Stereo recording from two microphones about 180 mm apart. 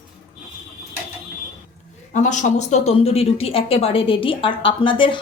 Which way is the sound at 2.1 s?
45° left (ahead or behind).